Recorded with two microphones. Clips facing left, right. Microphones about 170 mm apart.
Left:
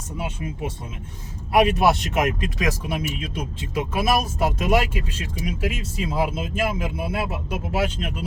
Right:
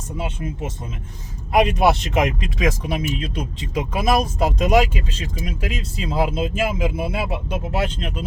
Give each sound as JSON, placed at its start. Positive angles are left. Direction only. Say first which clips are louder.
{"t": 0.2, "sound": "speech", "louder": "right 1 dB", "side_deg": 10}